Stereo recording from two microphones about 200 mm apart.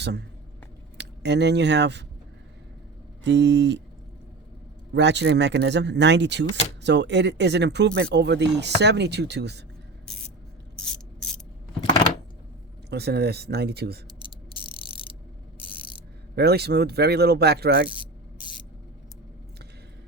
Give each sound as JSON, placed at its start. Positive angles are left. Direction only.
{"t": 0.9, "sound": "speech", "side_deg": -60}
{"t": 3.2, "sound": "speech", "side_deg": -60}
{"t": 4.9, "sound": "speech", "side_deg": -60}
{"t": 10.8, "sound": "ratchet", "side_deg": 0}
{"t": 12.9, "sound": "speech", "side_deg": -55}
{"t": 14.6, "sound": "a sound", "side_deg": 25}
{"t": 16.3, "sound": "speech", "side_deg": -55}